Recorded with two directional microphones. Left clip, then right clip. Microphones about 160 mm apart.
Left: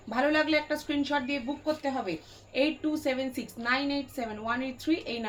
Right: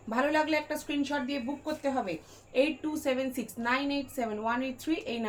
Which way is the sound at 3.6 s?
35° right (ahead or behind).